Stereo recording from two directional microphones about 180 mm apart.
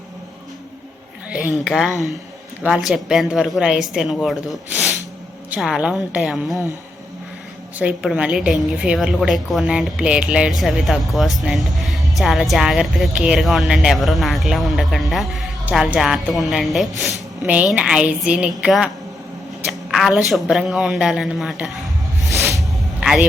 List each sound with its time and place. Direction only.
1.6 s a woman's voice: 5° right (ahead or behind)
7.8 s a woman's voice: 5° right (ahead or behind)
22.2 s music: 15° right (ahead or behind)
23.0 s a sound: centre (ahead or behind)